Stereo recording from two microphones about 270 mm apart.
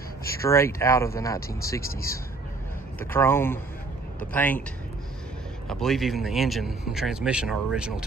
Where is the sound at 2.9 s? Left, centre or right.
Centre.